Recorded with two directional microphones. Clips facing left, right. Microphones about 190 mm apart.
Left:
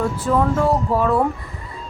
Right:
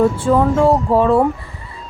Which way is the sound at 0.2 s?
30° right (ahead or behind).